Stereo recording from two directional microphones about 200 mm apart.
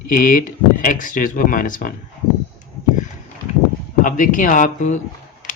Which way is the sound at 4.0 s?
40° left (ahead or behind).